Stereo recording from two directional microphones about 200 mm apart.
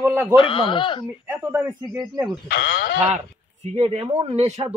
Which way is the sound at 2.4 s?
50° left (ahead or behind).